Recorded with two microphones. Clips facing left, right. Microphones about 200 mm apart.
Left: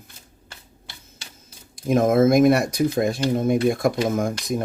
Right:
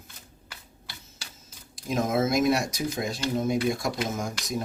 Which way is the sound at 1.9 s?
55° left (ahead or behind).